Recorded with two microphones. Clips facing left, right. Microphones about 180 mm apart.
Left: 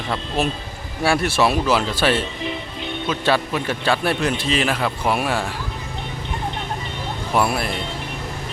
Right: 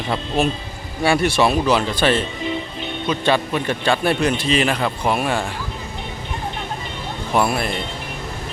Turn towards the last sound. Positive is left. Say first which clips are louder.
# right 1 dB
turn(degrees=5)  # may be behind; listen again after turning